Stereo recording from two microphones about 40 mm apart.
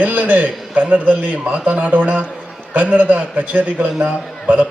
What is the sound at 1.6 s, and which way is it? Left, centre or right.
A man's voice, right.